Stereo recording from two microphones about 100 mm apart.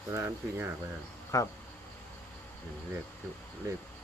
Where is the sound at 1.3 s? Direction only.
30° left (ahead or behind).